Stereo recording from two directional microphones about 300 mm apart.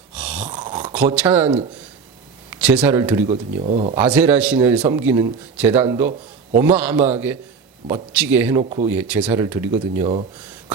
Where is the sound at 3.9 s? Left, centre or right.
Centre.